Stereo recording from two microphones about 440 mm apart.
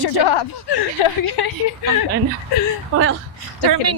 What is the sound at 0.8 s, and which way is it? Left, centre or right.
Speech, left.